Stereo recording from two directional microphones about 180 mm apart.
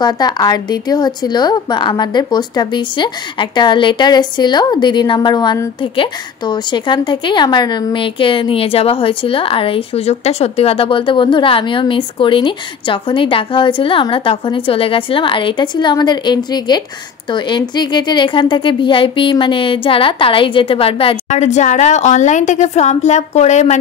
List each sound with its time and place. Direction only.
0.0 s a woman's voice: 25° left (ahead or behind); by 23.8 s 40° left (ahead or behind)